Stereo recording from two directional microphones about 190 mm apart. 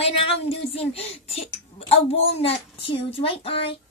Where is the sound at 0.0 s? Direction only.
30° left (ahead or behind).